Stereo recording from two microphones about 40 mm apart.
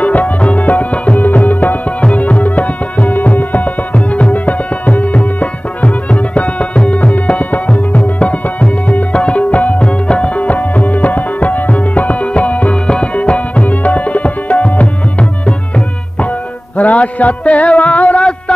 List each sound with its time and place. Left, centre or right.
0.0 s music: left
2.0 s music: left
9.8 s tabla: left
16.7 s music: left